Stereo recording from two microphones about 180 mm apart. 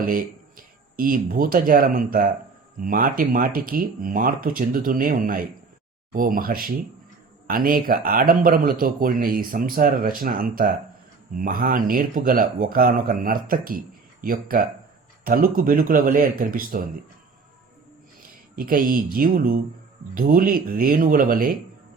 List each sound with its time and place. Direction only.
0.0 s speech: 50° right (ahead or behind)
18.5 s speech: 50° right (ahead or behind)